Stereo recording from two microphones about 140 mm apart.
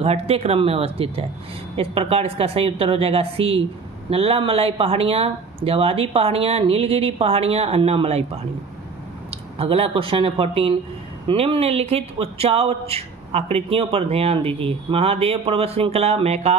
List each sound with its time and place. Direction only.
0.0 s a man's voice: 45° right (ahead or behind)
9.3 s a man's voice: 45° right (ahead or behind)